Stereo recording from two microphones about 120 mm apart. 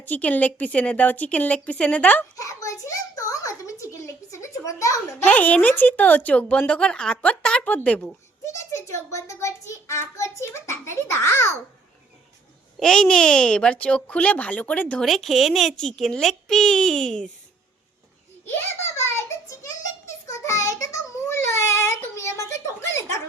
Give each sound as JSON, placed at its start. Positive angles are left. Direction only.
{"t": 0.0, "sound": "speech", "side_deg": 15}
{"t": 2.3, "sound": "a child's voice", "side_deg": 25}
{"t": 5.3, "sound": "speech", "side_deg": 10}
{"t": 8.5, "sound": "a child's voice", "side_deg": 25}
{"t": 12.8, "sound": "speech", "side_deg": 5}
{"t": 18.9, "sound": "child singing", "side_deg": 25}
{"t": 21.2, "sound": "a child's voice", "side_deg": 25}